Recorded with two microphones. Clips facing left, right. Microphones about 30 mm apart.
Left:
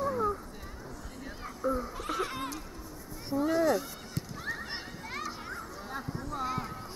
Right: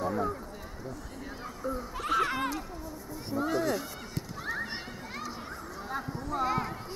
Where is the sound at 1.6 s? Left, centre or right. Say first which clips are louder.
Left 4 dB; centre.